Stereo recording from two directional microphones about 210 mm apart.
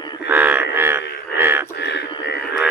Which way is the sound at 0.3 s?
10° right (ahead or behind).